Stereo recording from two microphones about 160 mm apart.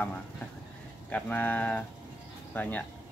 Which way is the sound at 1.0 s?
10° left (ahead or behind).